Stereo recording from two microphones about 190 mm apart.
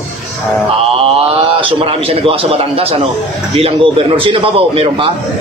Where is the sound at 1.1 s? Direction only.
30° right (ahead or behind).